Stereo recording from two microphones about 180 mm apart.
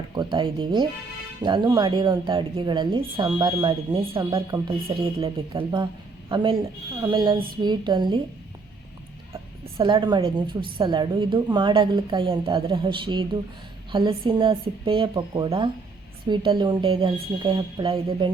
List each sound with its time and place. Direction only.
0.1 s a woman's voice: 25° right (ahead or behind)
9.7 s a woman's voice: 25° right (ahead or behind)